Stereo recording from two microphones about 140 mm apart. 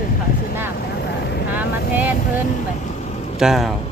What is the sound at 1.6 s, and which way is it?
Speech, 10° right (ahead or behind).